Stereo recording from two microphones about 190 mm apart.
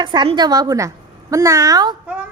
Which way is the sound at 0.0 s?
25° right (ahead or behind).